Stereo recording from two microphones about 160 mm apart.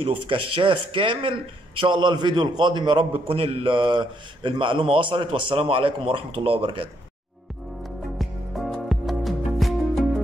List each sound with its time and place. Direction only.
0.0 s a man's voice: 35° right (ahead or behind)
8.2 s music: centre (ahead or behind)